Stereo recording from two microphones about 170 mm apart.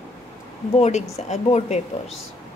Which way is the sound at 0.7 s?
40° left (ahead or behind).